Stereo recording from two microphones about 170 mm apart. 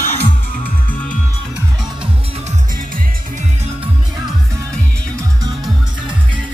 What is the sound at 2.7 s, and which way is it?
Music, 55° right (ahead or behind).